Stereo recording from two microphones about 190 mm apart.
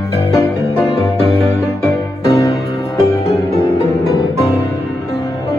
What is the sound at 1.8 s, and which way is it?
Music, 15° left (ahead or behind).